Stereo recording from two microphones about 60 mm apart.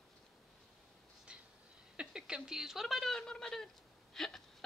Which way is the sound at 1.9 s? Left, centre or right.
Centre.